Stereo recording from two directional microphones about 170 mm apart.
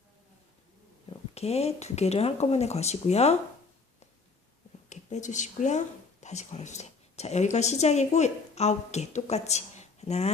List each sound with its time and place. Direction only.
1.3 s speech: 35° left (ahead or behind)
4.9 s speech: 45° left (ahead or behind)